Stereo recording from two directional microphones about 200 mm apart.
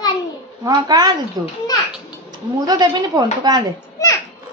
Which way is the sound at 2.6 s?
20° right (ahead or behind).